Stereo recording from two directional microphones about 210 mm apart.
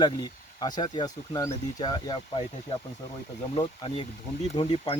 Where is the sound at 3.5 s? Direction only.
25° left (ahead or behind).